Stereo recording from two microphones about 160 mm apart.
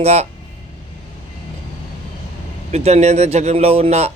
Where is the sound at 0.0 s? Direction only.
40° right (ahead or behind).